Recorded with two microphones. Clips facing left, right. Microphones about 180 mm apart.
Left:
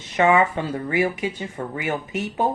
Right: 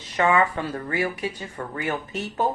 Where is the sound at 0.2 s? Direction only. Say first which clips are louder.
Left 3 dB; 20° left (ahead or behind).